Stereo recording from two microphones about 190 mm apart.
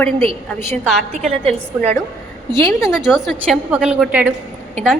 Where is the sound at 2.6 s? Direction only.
15° left (ahead or behind).